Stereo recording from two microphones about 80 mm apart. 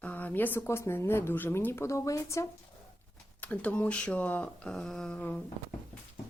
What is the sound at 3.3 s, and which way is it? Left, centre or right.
Speech, centre.